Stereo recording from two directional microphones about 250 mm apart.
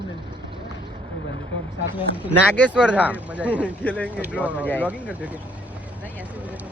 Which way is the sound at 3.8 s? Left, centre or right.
Centre.